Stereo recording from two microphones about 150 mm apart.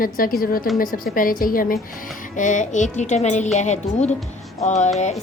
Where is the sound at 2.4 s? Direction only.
55° left (ahead or behind).